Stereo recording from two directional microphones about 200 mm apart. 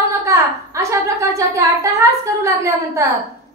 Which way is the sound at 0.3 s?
15° right (ahead or behind).